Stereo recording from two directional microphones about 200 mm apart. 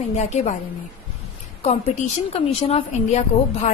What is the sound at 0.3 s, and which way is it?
Speech, 35° left (ahead or behind).